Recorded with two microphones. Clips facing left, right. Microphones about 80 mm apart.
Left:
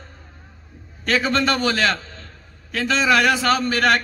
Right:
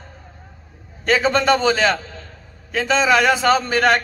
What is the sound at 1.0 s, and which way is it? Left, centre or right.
A man's voice, right.